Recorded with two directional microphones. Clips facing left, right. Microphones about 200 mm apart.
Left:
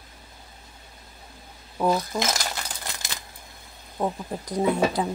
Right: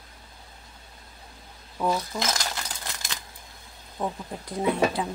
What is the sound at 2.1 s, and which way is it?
Speech, 40° left (ahead or behind).